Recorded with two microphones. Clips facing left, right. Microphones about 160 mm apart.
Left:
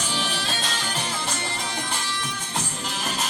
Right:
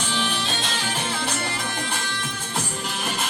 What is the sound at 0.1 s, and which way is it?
Music, 5° left (ahead or behind).